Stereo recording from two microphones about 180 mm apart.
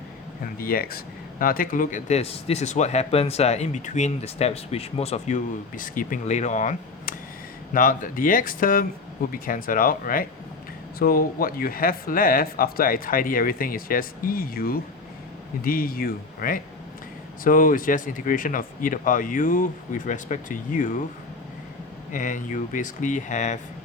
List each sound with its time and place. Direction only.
0.6 s speech: 55° left (ahead or behind)
22.1 s speech: 45° left (ahead or behind)